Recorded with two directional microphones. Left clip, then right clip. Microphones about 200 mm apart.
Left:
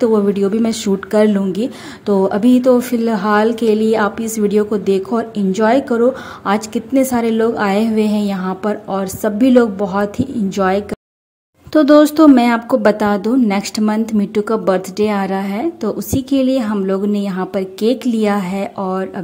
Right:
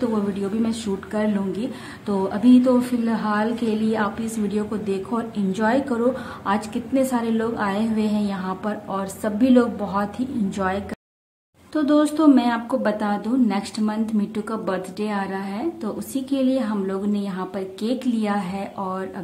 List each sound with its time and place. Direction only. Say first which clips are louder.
0.0 s a woman's voice: left 11 dB; 30° left (ahead or behind)